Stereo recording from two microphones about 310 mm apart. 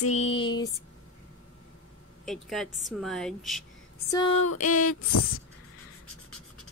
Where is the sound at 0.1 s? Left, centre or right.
Centre.